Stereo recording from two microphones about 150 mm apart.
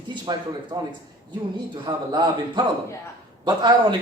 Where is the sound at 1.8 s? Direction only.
30° right (ahead or behind).